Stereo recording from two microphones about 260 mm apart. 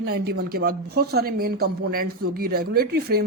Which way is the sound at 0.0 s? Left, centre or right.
Right.